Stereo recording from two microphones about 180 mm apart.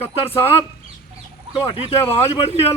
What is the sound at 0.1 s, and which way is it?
Speech, 35° left (ahead or behind).